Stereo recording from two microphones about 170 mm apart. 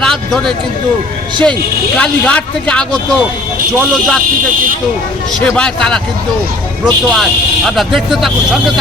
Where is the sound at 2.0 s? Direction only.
5° left (ahead or behind).